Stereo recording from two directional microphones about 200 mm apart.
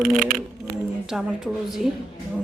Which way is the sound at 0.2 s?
45° right (ahead or behind).